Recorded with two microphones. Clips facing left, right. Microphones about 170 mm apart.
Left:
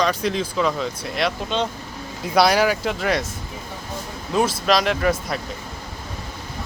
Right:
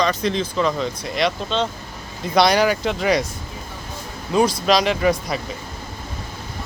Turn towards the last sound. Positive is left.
turn(degrees=0)  # may be behind; listen again after turning